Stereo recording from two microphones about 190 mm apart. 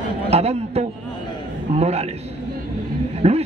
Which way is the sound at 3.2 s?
35° right (ahead or behind).